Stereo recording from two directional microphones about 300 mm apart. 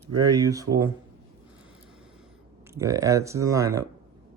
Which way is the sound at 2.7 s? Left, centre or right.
Centre.